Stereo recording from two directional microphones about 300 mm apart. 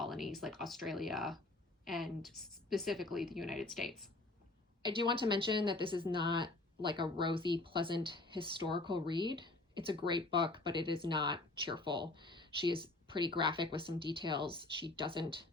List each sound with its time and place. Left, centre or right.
0.0 s a woman's voice: centre
4.8 s speech: centre